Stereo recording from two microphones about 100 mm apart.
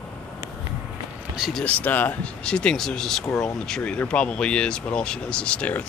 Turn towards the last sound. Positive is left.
turn(degrees=15)  # may be behind; listen again after turning